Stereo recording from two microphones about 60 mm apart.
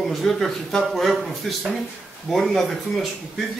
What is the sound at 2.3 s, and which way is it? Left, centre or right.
Speech, centre.